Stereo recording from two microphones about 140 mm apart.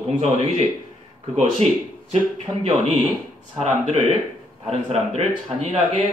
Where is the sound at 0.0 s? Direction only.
55° right (ahead or behind).